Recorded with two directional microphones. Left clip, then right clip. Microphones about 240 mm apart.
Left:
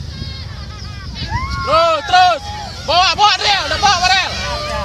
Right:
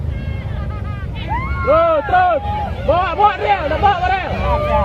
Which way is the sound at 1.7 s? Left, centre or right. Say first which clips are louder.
Left 1 dB; centre.